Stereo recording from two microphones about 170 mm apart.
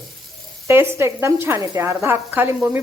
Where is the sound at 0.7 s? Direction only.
15° right (ahead or behind).